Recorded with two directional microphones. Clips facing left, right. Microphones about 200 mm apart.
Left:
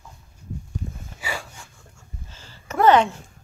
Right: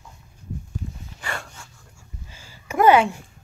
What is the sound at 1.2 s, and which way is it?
Wheeze, centre (ahead or behind).